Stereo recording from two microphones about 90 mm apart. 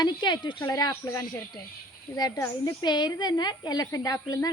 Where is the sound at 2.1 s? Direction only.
50° left (ahead or behind).